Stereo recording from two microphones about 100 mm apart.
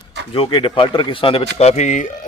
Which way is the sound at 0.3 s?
60° left (ahead or behind).